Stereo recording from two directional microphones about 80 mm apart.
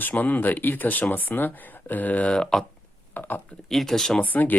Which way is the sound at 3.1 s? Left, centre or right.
Left.